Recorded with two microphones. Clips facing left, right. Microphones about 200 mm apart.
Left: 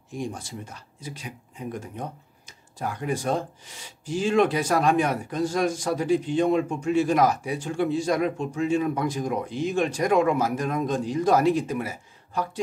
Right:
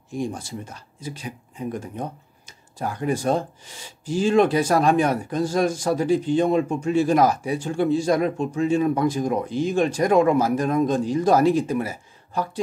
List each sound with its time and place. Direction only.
0.3 s speech: 30° right (ahead or behind)